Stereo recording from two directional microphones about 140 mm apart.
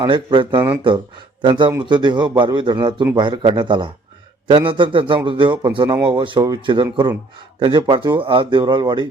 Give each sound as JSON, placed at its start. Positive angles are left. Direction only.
{"t": 0.0, "sound": "a man's voice", "side_deg": -35}